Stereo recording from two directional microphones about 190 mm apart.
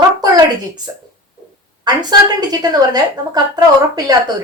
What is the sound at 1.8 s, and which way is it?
Speech, 20° right (ahead or behind).